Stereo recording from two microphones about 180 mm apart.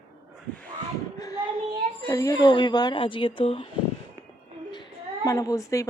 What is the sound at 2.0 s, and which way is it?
Speech, 20° left (ahead or behind).